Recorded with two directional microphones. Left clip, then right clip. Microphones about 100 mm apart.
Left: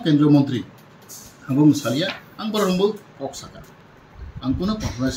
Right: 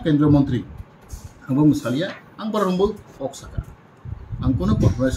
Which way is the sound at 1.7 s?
15° right (ahead or behind).